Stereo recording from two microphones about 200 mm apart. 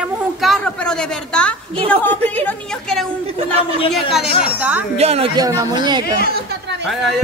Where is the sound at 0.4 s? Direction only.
Centre (ahead or behind).